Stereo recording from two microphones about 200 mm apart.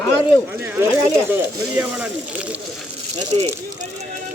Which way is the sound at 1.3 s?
10° right (ahead or behind).